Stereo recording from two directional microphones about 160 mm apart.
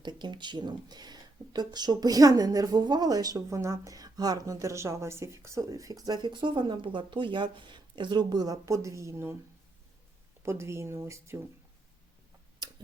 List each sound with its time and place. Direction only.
0.0 s speech: 25° right (ahead or behind)
10.4 s speech: 15° right (ahead or behind)